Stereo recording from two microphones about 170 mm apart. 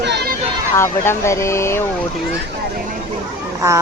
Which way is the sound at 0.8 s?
15° left (ahead or behind).